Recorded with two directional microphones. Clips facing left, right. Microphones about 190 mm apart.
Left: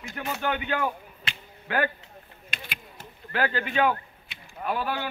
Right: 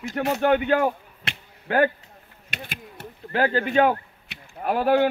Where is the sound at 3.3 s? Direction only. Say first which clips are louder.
Right 5 dB; 35° right (ahead or behind).